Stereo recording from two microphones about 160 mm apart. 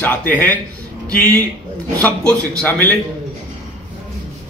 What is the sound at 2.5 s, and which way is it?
Speech, 10° left (ahead or behind).